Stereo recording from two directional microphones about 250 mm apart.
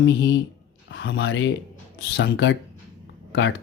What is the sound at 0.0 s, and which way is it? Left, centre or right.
Speech, left.